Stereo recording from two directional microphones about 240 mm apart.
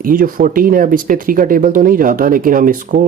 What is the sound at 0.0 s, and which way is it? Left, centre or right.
Speech, right.